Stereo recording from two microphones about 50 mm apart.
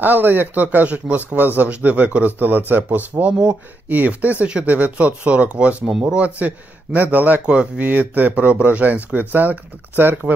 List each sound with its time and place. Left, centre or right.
0.0 s a man's voice: right
0.7 s a man's voice: right
5.9 s speech: centre
6.1 s a man's voice: right
7.4 s speech: right
7.8 s a man's voice: right
8.3 s a man's voice: right